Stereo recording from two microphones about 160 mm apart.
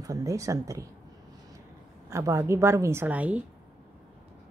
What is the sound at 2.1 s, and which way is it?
A woman's voice, 20° right (ahead or behind).